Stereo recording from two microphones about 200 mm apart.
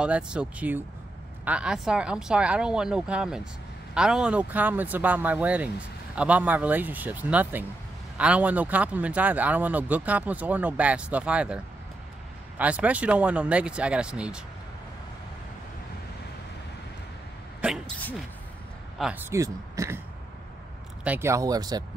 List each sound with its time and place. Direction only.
0.0 s speech: 5° right (ahead or behind)
17.9 s speech: 5° left (ahead or behind)
18.9 s speech: 5° right (ahead or behind)
21.0 s speech: 10° right (ahead or behind)